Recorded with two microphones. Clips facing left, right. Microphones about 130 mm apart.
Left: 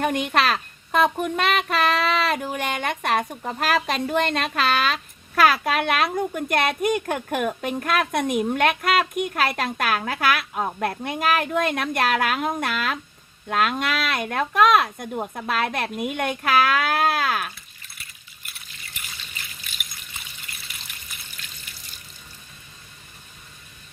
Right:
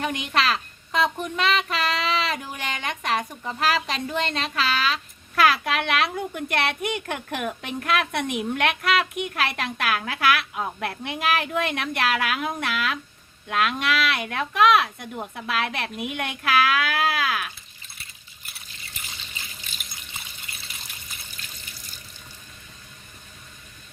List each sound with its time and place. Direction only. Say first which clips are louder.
0.0 s a child's voice: left 3 dB; 45° left (ahead or behind)